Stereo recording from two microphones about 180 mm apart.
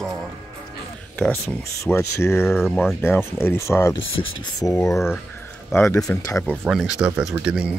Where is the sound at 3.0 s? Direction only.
10° left (ahead or behind).